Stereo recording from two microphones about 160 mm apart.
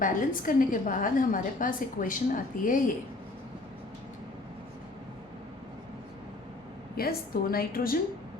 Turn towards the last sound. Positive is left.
turn(degrees=65)  # may be behind; listen again after turning